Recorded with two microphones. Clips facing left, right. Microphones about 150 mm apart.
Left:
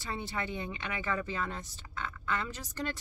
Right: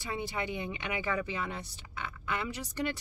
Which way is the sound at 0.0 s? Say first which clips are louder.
Right 2 dB; 10° right (ahead or behind).